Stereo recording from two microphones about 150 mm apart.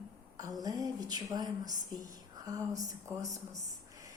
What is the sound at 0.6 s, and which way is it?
A woman's voice, 25° right (ahead or behind).